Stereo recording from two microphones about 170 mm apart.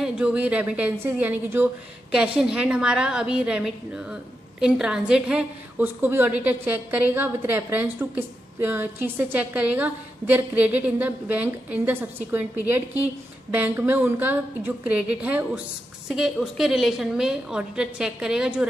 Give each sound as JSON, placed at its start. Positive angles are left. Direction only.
{"t": 0.0, "sound": "a woman's voice", "side_deg": -5}